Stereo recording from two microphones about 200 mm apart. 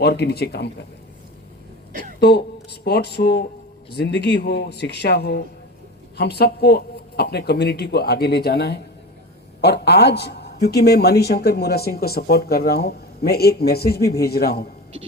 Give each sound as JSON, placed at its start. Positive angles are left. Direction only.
{"t": 0.0, "sound": "a man's voice", "side_deg": 55}
{"t": 1.9, "sound": "a sound", "side_deg": -45}
{"t": 2.2, "sound": "a man's voice", "side_deg": 55}